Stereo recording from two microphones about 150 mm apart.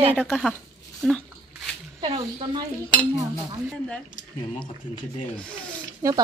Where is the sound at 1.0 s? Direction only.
5° left (ahead or behind).